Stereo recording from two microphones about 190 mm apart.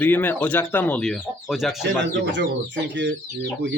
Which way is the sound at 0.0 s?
10° left (ahead or behind).